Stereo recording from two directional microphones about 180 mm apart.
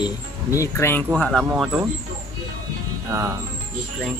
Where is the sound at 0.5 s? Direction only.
15° left (ahead or behind).